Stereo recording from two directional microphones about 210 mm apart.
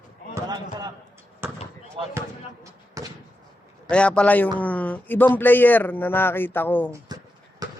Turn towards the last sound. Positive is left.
turn(degrees=-15)  # may be behind; listen again after turning